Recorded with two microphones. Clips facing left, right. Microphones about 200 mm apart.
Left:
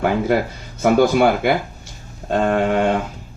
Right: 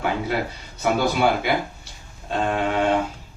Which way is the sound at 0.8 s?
55° left (ahead or behind).